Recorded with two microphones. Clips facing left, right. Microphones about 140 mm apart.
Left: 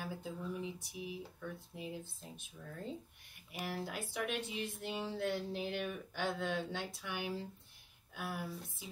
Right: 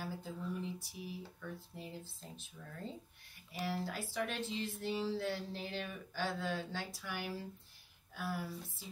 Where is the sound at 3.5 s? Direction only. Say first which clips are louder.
Right 2 dB; 15° left (ahead or behind).